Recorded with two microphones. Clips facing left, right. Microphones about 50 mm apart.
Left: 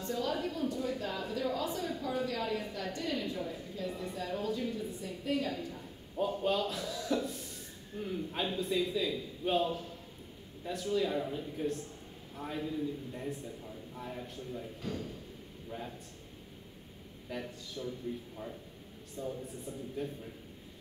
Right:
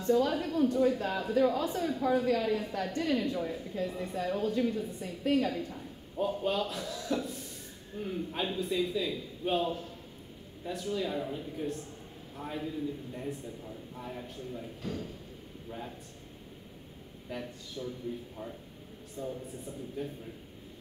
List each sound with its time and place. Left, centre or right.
0.0 s a woman's voice: right
6.1 s a man's voice: centre
17.3 s speech: centre
17.8 s a man's voice: centre
19.2 s a man's voice: centre